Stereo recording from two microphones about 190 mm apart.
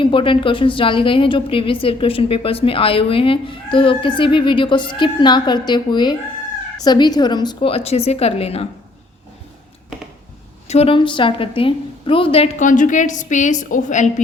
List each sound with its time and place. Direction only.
0.0 s a woman's voice: 25° left (ahead or behind)
10.7 s a woman's voice: 30° left (ahead or behind)